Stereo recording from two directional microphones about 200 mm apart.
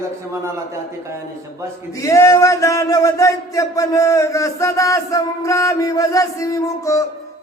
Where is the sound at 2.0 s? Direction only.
15° left (ahead or behind).